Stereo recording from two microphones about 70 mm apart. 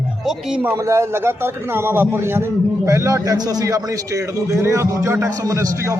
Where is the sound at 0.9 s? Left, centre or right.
Right.